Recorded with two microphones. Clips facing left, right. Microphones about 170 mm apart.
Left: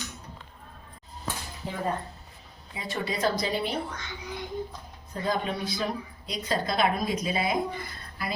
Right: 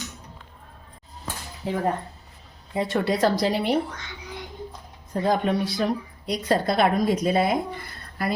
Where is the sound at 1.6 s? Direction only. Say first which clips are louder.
Right 6 dB; 70° right (ahead or behind).